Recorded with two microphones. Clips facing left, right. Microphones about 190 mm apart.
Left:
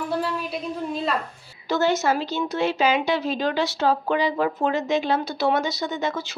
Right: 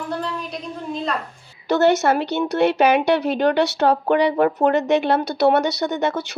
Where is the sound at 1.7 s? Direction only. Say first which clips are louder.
Right 5 dB; 65° right (ahead or behind).